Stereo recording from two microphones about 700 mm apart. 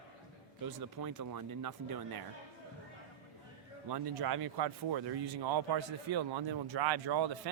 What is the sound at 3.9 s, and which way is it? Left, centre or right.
A man's voice, right.